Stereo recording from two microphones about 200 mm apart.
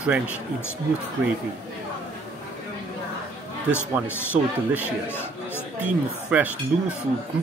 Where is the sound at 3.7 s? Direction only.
10° left (ahead or behind).